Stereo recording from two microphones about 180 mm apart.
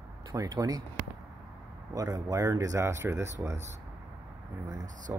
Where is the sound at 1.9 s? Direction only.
20° right (ahead or behind).